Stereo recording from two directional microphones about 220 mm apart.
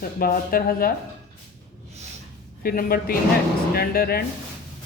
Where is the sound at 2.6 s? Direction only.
40° left (ahead or behind).